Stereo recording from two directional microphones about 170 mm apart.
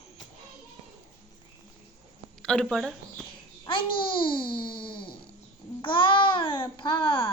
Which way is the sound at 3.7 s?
30° left (ahead or behind).